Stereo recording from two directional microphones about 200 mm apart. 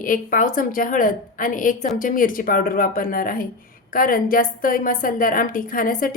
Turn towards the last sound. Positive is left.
turn(degrees=45)  # may be behind; listen again after turning